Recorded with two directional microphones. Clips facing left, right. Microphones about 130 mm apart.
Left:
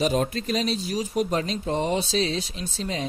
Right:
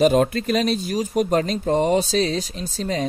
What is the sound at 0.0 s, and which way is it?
Speech, 60° right (ahead or behind).